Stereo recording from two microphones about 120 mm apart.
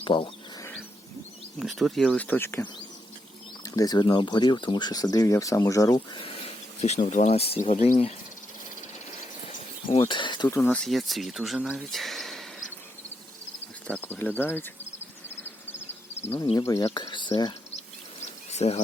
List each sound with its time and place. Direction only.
0.0 s speech: 45° left (ahead or behind)
1.5 s speech: centre (ahead or behind)
2.2 s speech: 15° left (ahead or behind)
3.6 s speech: 30° left (ahead or behind)
6.1 s speech: 50° left (ahead or behind)
7.6 s speech: 80° left; by 8.1 s 55° left (ahead or behind)
9.9 s speech: 45° left (ahead or behind)
10.5 s speech: 15° left (ahead or behind)
10.8 s speech: centre (ahead or behind)
13.8 s speech: 15° left (ahead or behind)
16.6 s speech: 30° left (ahead or behind)
18.2 s bird: 65° left (ahead or behind)